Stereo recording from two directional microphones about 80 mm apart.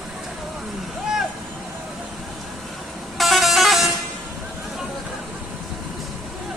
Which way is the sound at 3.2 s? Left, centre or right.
Centre.